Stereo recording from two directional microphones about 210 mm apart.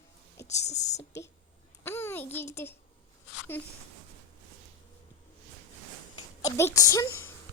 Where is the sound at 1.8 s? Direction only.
10° left (ahead or behind).